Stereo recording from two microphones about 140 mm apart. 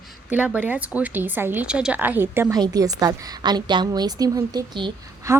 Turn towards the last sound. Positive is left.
turn(degrees=-20)  # may be behind; listen again after turning